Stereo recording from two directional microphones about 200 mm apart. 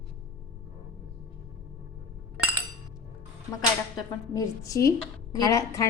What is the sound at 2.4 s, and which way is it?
Chink, 10° right (ahead or behind).